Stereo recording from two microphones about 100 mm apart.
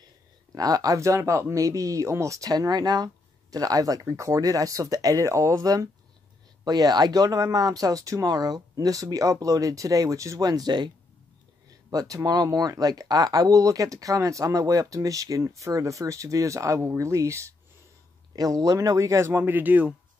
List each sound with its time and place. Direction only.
0.6 s speech: 40° right (ahead or behind)
11.9 s speech: 35° right (ahead or behind); by 19.9 s 15° right (ahead or behind)